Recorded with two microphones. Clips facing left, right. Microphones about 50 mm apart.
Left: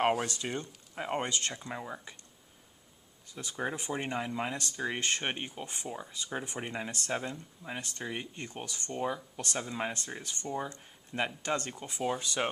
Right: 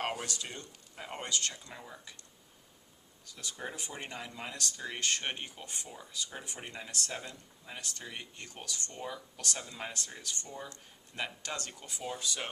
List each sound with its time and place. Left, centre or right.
0.3 s speech: left
3.2 s speech: left